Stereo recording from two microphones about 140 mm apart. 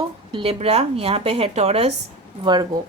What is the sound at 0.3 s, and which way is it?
A woman's voice, 40° right (ahead or behind).